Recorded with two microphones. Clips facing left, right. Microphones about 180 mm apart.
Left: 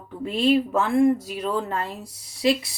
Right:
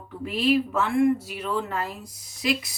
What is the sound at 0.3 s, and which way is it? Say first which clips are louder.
Speech: left 2 dB; 30° left (ahead or behind).